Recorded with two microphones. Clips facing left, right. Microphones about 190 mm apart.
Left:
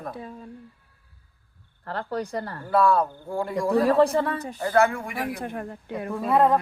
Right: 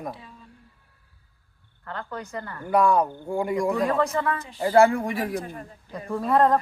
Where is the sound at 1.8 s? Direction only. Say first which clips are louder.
Left 5 dB; 35° left (ahead or behind).